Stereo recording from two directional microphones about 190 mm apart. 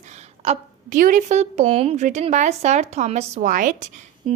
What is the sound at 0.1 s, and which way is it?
A woman's voice, 35° right (ahead or behind).